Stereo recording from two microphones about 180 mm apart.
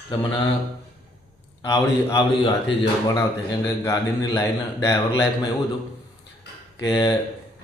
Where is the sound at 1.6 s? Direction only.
20° left (ahead or behind).